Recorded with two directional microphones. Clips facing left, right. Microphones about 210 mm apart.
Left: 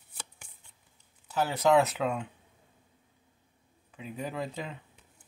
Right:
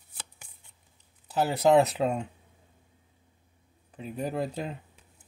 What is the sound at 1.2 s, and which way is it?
Speech, 35° right (ahead or behind).